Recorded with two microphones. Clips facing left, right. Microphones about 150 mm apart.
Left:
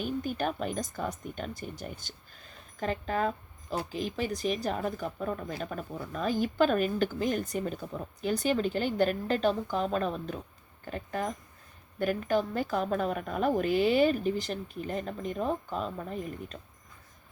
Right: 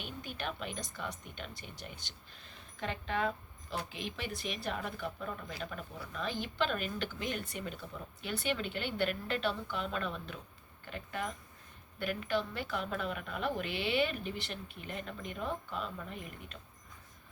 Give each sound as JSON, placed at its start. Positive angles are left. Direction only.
{"t": 0.0, "sound": "a woman's voice", "side_deg": 40}